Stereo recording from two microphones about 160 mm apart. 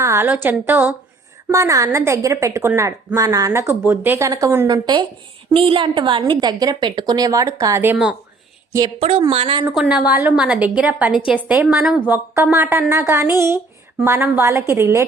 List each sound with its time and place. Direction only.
0.0 s a woman's voice: 15° right (ahead or behind)
9.0 s a woman's voice: 35° right (ahead or behind)
9.7 s a woman's voice: centre (ahead or behind)